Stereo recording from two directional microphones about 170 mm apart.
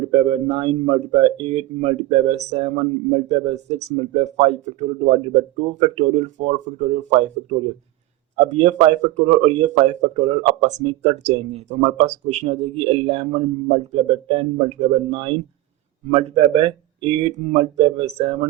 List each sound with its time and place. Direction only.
0.1 s speech: 35° right (ahead or behind)
8.4 s speech: 40° right (ahead or behind)